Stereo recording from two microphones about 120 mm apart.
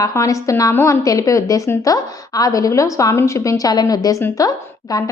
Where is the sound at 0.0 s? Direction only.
25° left (ahead or behind).